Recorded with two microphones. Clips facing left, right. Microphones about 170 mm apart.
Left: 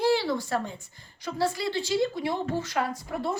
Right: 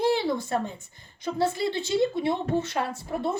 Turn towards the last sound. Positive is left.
turn(degrees=-25)  # may be behind; listen again after turning